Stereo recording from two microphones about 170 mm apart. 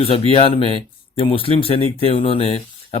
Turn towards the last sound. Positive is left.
turn(degrees=35)  # may be behind; listen again after turning